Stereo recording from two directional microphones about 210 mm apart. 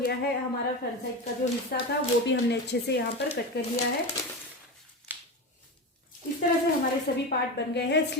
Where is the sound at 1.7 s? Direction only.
45° left (ahead or behind).